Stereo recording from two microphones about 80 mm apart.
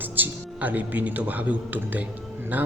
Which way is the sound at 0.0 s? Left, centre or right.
Right.